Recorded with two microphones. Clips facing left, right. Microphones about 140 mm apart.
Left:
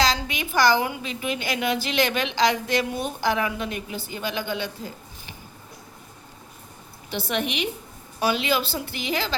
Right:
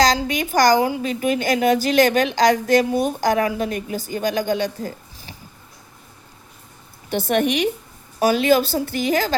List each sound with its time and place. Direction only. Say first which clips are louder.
0.0 s a woman's voice: right 6 dB; 40° right (ahead or behind)
1.1 s a woman's voice: right 8 dB; 45° right (ahead or behind)
7.1 s a woman's voice: right 8 dB; 50° right (ahead or behind)